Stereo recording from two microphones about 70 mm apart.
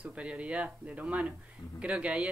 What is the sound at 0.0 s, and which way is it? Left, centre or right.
Speech, centre.